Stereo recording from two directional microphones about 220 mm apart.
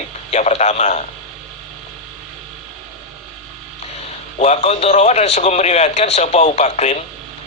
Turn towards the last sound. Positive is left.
turn(degrees=30)  # may be behind; listen again after turning